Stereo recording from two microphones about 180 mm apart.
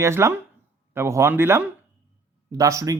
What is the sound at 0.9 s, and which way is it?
Speech, 15° right (ahead or behind).